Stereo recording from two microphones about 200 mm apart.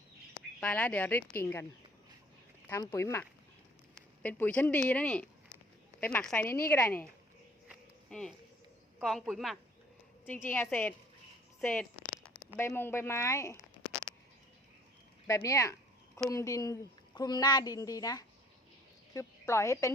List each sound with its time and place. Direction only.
0.6 s a woman's voice: 5° left (ahead or behind)
2.9 s a woman's voice: 15° left (ahead or behind)
7.7 s a sound: centre (ahead or behind)
9.0 s a woman's voice: centre (ahead or behind)
11.6 s a sound: 5° left (ahead or behind)
12.5 s a woman's voice: 10° left (ahead or behind)
15.3 s a woman's voice: 15° left (ahead or behind)